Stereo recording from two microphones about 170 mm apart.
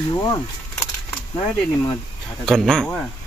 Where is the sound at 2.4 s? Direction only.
5° left (ahead or behind).